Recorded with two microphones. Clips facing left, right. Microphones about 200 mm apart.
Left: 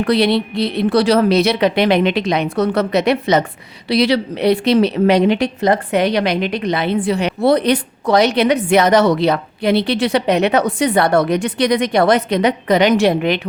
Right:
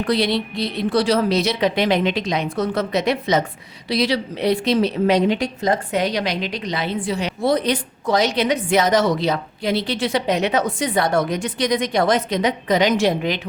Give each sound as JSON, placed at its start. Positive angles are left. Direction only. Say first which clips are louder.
{"t": 0.0, "sound": "speech", "louder": "left 5 dB", "side_deg": 65}